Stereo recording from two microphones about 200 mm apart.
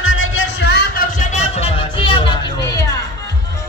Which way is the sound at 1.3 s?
30° left (ahead or behind).